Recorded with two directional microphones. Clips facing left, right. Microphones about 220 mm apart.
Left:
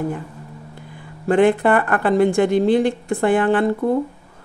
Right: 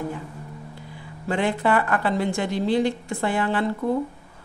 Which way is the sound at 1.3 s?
55° left (ahead or behind).